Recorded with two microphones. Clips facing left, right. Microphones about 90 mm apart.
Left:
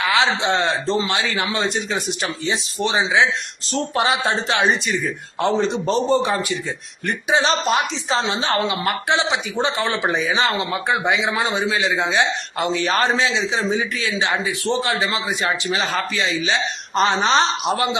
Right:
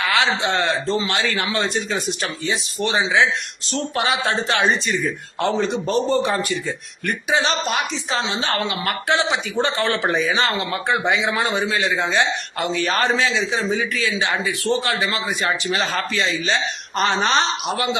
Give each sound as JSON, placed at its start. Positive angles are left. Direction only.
{"t": 0.0, "sound": "a man's voice", "side_deg": 20}
{"t": 3.7, "sound": "a man's voice", "side_deg": 40}
{"t": 4.0, "sound": "speech", "side_deg": 25}
{"t": 5.6, "sound": "a man's voice", "side_deg": 35}
{"t": 6.1, "sound": "a man's voice", "side_deg": 20}
{"t": 16.5, "sound": "a man's voice", "side_deg": 20}